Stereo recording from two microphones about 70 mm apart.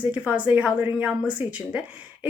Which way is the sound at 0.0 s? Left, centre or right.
Right.